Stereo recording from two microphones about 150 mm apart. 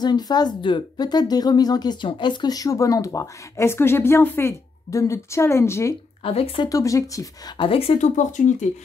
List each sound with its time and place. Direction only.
0.0 s speech: 30° left (ahead or behind)
6.2 s speech: 40° left (ahead or behind)
6.7 s speech: 20° left (ahead or behind)
7.5 s speech: 40° left (ahead or behind); by 8.6 s 55° left (ahead or behind)